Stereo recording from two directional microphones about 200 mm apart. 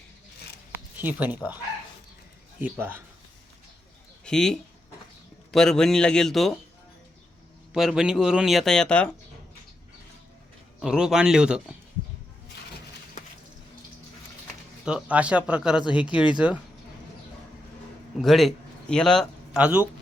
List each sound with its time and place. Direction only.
1.0 s speech: 10° right (ahead or behind)
2.6 s speech: 10° right (ahead or behind)
4.3 s speech: 5° left (ahead or behind)
7.7 s speech: centre (ahead or behind)
10.8 s speech: 5° right (ahead or behind)
14.8 s speech: 5° right (ahead or behind)
18.2 s a man's voice: centre (ahead or behind)